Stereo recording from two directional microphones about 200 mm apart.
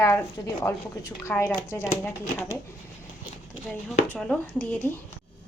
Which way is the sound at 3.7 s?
5° left (ahead or behind).